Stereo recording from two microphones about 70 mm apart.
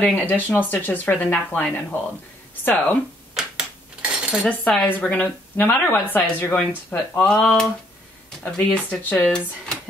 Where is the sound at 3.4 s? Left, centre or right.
Centre.